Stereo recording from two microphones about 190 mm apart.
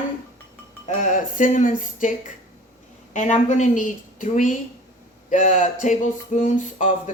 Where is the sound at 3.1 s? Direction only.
40° left (ahead or behind).